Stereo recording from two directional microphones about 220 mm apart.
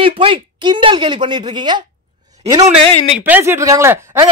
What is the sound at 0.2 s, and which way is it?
Speech, 25° right (ahead or behind).